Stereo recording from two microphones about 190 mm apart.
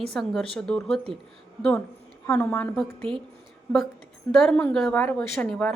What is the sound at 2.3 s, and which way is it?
Speech, 10° left (ahead or behind).